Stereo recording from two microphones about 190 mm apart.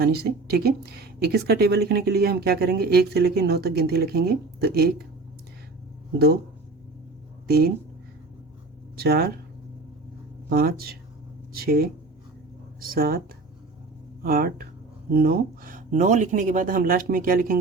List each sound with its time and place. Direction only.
0.0 s speech: 55° right (ahead or behind)
7.4 s speech: 55° right (ahead or behind)
9.0 s speech: 55° right (ahead or behind)
10.5 s speech: 50° right (ahead or behind)